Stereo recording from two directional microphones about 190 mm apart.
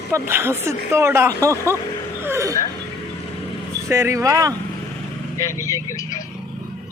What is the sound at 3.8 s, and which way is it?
Speech, 15° right (ahead or behind).